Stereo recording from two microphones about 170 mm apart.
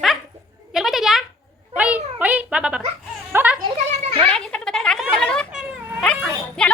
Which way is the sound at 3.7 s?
35° right (ahead or behind).